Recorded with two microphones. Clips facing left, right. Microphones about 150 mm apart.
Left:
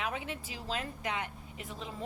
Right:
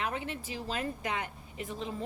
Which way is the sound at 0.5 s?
50° right (ahead or behind).